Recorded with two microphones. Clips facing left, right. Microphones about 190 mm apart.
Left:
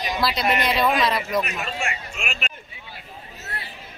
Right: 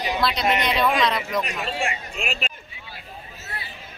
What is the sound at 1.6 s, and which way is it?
Speech, 30° right (ahead or behind).